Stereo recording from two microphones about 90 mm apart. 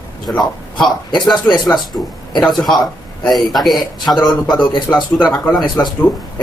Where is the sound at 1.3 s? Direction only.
5° left (ahead or behind).